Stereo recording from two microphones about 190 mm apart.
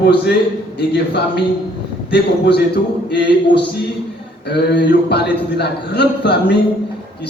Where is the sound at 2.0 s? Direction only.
60° left (ahead or behind).